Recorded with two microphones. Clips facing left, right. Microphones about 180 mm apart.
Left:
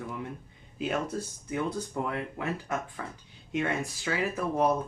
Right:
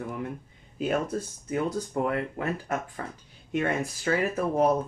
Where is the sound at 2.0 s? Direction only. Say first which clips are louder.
Right 5 dB; 50° right (ahead or behind).